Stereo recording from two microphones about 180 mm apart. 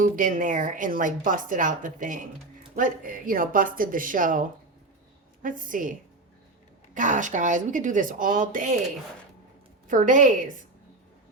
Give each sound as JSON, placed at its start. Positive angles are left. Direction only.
{"t": 0.0, "sound": "speech", "side_deg": -50}
{"t": 6.9, "sound": "speech", "side_deg": -45}
{"t": 9.8, "sound": "a woman's voice", "side_deg": -45}